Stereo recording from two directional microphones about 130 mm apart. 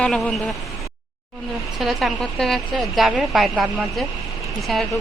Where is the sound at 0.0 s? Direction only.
5° left (ahead or behind).